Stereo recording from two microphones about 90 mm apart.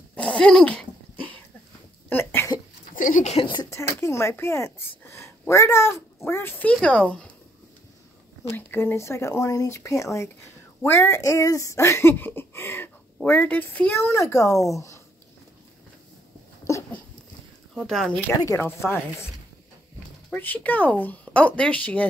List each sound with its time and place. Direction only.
0.1 s dog: 15° left (ahead or behind)
2.0 s a sound: 25° left (ahead or behind)
3.3 s a sound: 65° left (ahead or behind)
3.7 s a sound: 30° left (ahead or behind)
5.5 s speech: 30° left (ahead or behind)
6.7 s speech: 10° left (ahead or behind)
8.5 s speech: 25° left (ahead or behind)
17.7 s speech: 5° left (ahead or behind)
18.4 s speech: 35° left (ahead or behind)
20.3 s speech: 20° left (ahead or behind)